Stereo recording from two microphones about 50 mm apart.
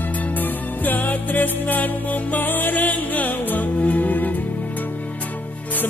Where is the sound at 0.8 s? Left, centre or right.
Left.